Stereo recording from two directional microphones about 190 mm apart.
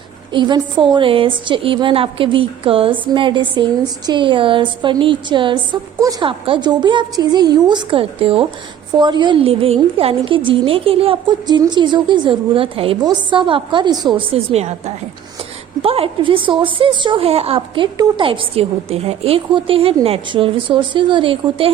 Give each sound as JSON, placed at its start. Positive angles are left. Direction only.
{"t": 0.3, "sound": "a woman's voice", "side_deg": -25}